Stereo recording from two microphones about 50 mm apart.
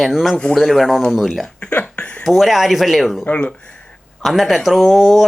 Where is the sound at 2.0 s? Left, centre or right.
Left.